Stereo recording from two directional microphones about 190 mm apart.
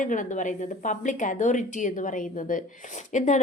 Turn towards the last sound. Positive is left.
turn(degrees=40)  # may be behind; listen again after turning